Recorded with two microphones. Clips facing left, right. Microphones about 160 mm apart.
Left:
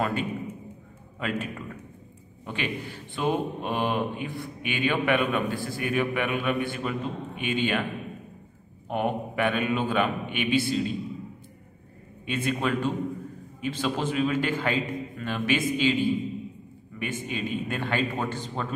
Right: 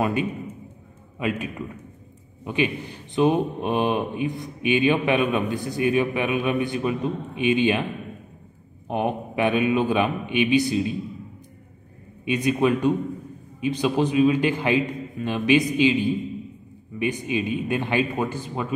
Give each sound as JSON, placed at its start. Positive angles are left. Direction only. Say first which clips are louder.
{"t": 0.0, "sound": "a man's voice", "louder": "right 4 dB", "side_deg": -15}
{"t": 2.4, "sound": "a man's voice", "louder": "right 7 dB", "side_deg": -15}
{"t": 8.8, "sound": "a man's voice", "louder": "right 2 dB", "side_deg": -20}
{"t": 12.3, "sound": "a man's voice", "louder": "right 6 dB", "side_deg": -15}